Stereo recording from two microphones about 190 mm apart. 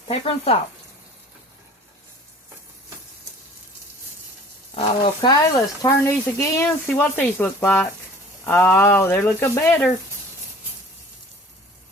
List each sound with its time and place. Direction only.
0.1 s speech: 30° left (ahead or behind)
4.7 s speech: 25° left (ahead or behind)